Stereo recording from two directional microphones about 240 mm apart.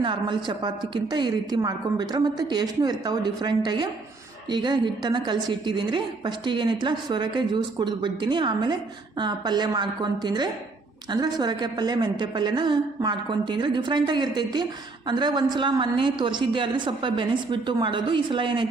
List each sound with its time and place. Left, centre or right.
0.0 s a woman's voice: centre